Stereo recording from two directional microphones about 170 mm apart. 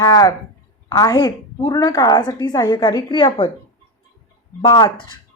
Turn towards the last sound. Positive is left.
turn(degrees=25)  # may be behind; listen again after turning